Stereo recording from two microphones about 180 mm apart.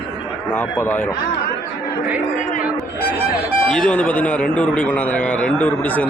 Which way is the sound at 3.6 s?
5° left (ahead or behind).